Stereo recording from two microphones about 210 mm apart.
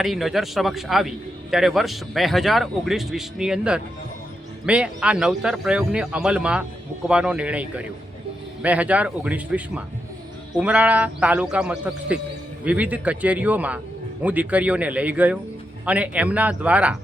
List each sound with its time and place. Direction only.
0.0 s a man's voice: centre (ahead or behind)